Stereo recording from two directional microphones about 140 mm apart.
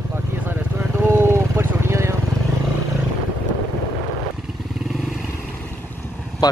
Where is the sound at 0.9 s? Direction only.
15° right (ahead or behind).